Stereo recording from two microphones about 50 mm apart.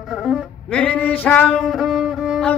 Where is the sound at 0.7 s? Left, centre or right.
Left.